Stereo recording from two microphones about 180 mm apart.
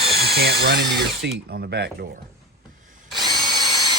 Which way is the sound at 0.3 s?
65° right (ahead or behind).